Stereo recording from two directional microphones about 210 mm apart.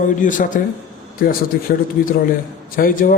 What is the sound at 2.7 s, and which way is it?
Speech, 40° left (ahead or behind).